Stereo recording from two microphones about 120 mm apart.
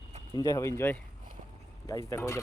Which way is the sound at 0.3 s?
30° left (ahead or behind).